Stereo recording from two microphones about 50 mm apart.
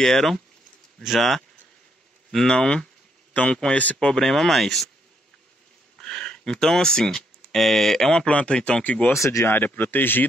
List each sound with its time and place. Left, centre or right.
0.0 s speech: centre
2.3 s speech: centre
3.7 s speech: left
4.0 s speech: centre
5.9 s speech: centre
8.3 s speech: left
8.5 s speech: centre
9.1 s speech: left
9.5 s speech: left